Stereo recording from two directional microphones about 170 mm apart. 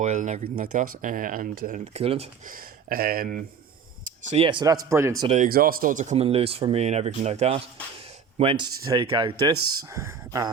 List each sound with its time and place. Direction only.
0.0 s speech: 45° right (ahead or behind)
2.5 s speech: 60° right (ahead or behind)
4.0 s speech: 40° right (ahead or behind); by 5.3 s 15° right (ahead or behind)
5.5 s speech: 60° right (ahead or behind); by 8.6 s 35° right (ahead or behind)
8.8 s speech: 20° right (ahead or behind)
9.5 s speech: 15° right (ahead or behind)